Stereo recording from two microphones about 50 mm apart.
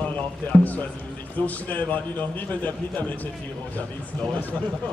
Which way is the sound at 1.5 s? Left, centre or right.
Left.